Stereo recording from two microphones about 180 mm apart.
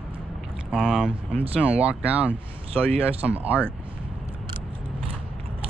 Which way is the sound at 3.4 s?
10° right (ahead or behind).